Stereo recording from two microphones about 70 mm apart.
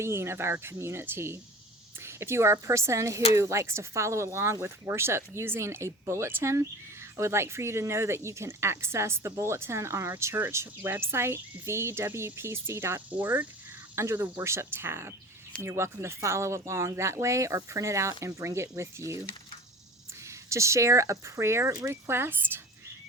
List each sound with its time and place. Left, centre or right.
0.0 s a woman's voice: right
13.1 s speech: right
13.9 s a woman's voice: right
20.2 s a woman's voice: right